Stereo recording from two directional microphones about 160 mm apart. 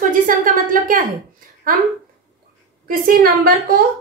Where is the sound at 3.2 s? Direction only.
65° right (ahead or behind).